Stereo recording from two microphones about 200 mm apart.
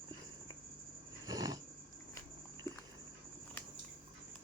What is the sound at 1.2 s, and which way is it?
Wild animals, 20° right (ahead or behind).